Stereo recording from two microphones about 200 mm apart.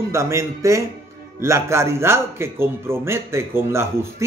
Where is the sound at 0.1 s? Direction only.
15° right (ahead or behind).